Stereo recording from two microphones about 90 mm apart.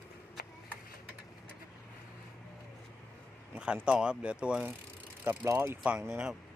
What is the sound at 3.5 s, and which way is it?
Speech, 10° right (ahead or behind).